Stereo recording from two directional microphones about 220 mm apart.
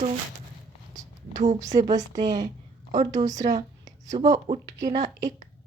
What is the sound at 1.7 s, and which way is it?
Speech, 35° right (ahead or behind).